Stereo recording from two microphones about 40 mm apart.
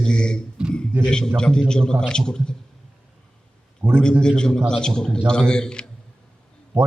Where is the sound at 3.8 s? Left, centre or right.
Right.